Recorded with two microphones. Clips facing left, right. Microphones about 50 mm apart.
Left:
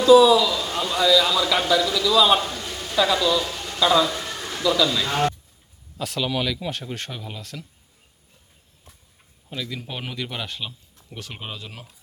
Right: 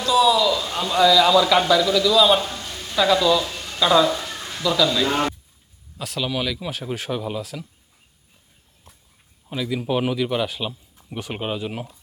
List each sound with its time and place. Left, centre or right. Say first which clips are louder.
0.0 s speech: left 4 dB; centre
8.9 s a sound: right 1 dB; centre
9.5 s speech: right 8 dB; centre
10.7 s speech: right 7 dB; centre